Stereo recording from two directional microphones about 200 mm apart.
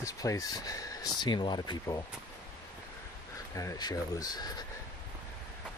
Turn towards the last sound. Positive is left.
turn(degrees=20)  # may be behind; listen again after turning